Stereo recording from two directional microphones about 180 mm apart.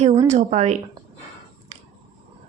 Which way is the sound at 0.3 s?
40° right (ahead or behind).